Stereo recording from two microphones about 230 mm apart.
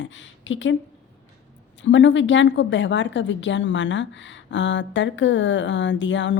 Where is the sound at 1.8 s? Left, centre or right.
Left.